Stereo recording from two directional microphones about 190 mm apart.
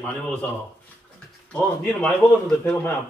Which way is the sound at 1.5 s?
10° left (ahead or behind).